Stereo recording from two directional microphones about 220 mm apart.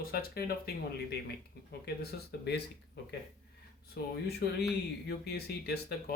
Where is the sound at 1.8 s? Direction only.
45° left (ahead or behind).